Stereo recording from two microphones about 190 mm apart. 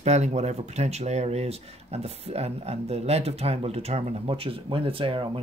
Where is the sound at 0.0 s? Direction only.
35° right (ahead or behind).